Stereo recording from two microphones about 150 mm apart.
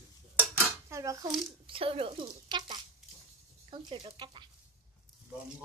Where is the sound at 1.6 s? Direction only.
40° right (ahead or behind).